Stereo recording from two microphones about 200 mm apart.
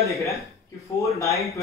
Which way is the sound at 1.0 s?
15° left (ahead or behind).